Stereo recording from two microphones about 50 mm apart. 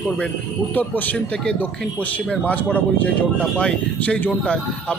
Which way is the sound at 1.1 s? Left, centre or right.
Left.